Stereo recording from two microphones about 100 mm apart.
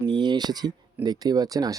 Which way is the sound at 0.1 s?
45° right (ahead or behind).